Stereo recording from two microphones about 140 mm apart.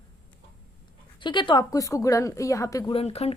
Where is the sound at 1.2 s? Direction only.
35° left (ahead or behind).